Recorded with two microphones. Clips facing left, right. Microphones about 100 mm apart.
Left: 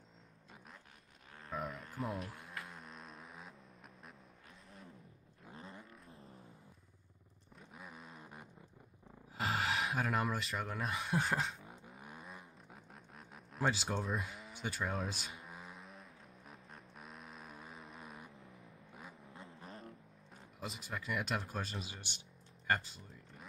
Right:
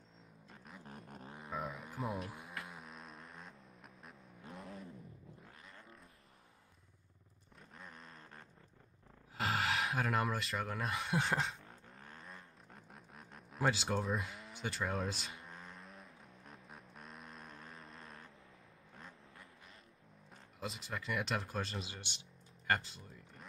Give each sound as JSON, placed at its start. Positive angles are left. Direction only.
{"t": 0.8, "sound": "vehicle", "side_deg": -45}
{"t": 1.4, "sound": "a sound", "side_deg": 0}
{"t": 5.5, "sound": "vehicle", "side_deg": 25}
{"t": 7.7, "sound": "a sound", "side_deg": 5}
{"t": 9.4, "sound": "speech", "side_deg": 0}
{"t": 11.7, "sound": "vehicle", "side_deg": 10}
{"t": 19.6, "sound": "vehicle", "side_deg": 40}
{"t": 20.6, "sound": "speech", "side_deg": 0}
{"t": 22.7, "sound": "a sound", "side_deg": 0}